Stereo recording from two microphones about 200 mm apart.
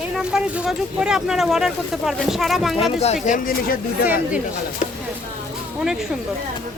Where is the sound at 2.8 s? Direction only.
30° left (ahead or behind).